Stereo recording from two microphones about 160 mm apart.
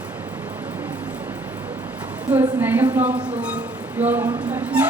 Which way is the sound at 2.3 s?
10° right (ahead or behind).